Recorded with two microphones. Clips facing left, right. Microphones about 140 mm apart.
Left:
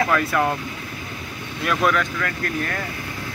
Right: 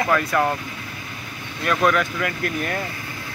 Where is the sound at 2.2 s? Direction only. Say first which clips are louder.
Right 1 dB; 15° right (ahead or behind).